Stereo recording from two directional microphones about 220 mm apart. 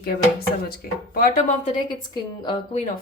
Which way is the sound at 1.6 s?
20° left (ahead or behind).